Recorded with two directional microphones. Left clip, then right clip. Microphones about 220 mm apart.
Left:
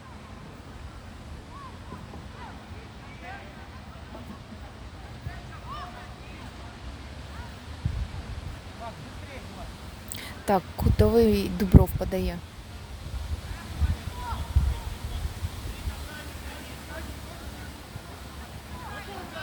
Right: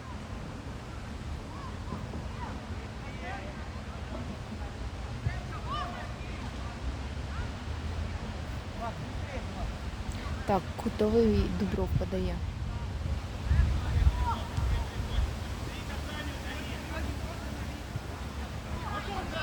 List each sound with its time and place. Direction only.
10.4 s speech: 35° left (ahead or behind)